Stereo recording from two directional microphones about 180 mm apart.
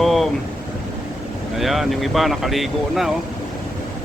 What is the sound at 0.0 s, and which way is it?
Vehicle, centre (ahead or behind).